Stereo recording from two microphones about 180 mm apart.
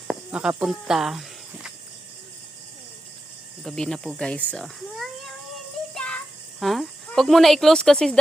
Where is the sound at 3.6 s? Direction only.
5° left (ahead or behind).